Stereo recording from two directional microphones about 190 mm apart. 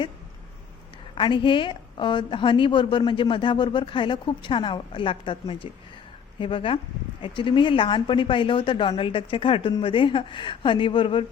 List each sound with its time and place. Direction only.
1.1 s a woman's voice: 25° left (ahead or behind)